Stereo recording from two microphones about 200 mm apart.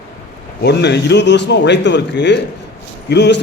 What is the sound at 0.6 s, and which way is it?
A man's voice, 60° left (ahead or behind).